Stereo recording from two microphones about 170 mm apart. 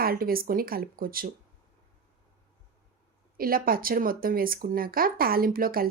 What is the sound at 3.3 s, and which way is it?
Speech, 60° right (ahead or behind).